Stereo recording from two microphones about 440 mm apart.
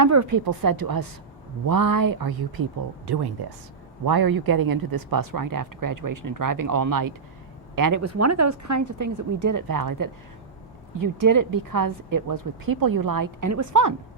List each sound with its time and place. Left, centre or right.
0.0 s speech: right